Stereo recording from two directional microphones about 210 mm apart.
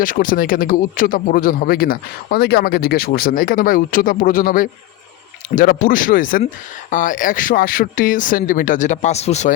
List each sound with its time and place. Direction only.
0.0 s a man's voice: 40° left (ahead or behind)
5.9 s speech: 40° left (ahead or behind)